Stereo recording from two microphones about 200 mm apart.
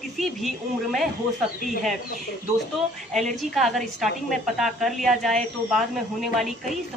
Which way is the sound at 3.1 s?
Centre (ahead or behind).